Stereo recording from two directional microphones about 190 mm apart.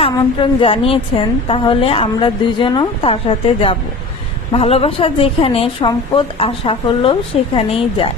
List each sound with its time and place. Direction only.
0.0 s a woman's voice: 30° left (ahead or behind)